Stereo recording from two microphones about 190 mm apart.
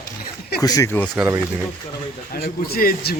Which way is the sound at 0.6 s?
20° left (ahead or behind).